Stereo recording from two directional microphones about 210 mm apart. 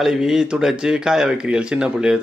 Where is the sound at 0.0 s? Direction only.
Centre (ahead or behind).